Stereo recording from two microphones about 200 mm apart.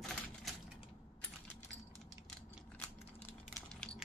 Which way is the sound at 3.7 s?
5° left (ahead or behind).